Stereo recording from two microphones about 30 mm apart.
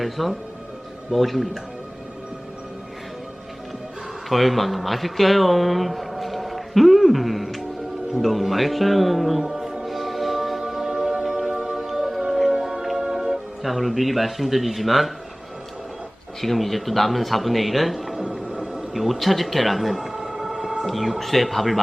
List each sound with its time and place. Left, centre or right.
0.0 s speech: centre
4.3 s speech: centre
9.8 s music: centre
13.0 s music: centre
13.7 s speech: centre
16.4 s speech: centre
18.3 s music: centre
18.9 s speech: centre
20.1 s a sound: centre
20.8 s speech: centre